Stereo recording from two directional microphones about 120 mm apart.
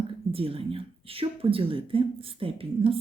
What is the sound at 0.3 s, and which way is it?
A woman's voice, 50° right (ahead or behind).